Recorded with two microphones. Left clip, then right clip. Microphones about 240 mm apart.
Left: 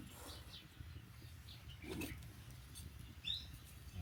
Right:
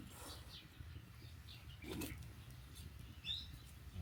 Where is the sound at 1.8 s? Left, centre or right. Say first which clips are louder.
Left 1 dB; centre.